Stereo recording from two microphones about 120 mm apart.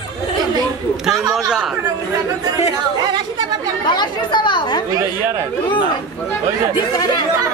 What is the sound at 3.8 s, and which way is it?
Speech, 40° left (ahead or behind).